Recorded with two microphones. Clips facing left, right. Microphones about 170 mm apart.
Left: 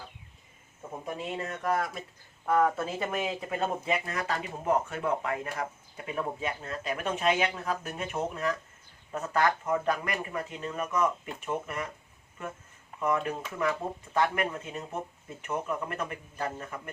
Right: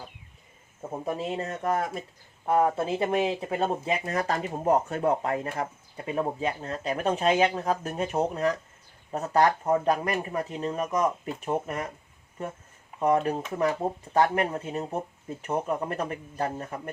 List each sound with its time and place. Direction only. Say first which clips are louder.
0.8 s speech: right 6 dB; 35° right (ahead or behind)
2.5 s speech: right 2 dB; 25° right (ahead or behind)